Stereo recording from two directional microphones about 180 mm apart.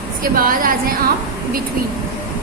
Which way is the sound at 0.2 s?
50° right (ahead or behind).